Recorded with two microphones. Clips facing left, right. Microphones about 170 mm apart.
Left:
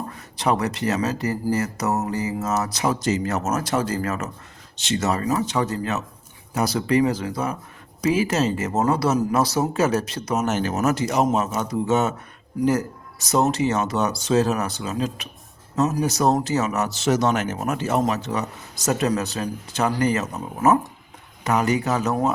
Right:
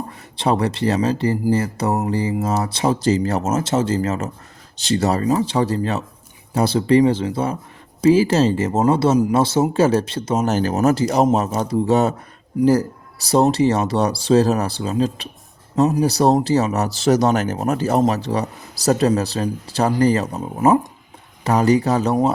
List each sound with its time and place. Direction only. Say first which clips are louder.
0.3 s speech: right 3 dB; 30° right (ahead or behind)